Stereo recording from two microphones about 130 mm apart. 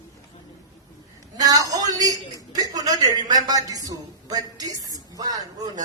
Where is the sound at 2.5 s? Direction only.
30° right (ahead or behind).